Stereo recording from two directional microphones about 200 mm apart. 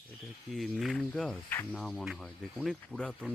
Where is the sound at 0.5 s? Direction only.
Centre (ahead or behind).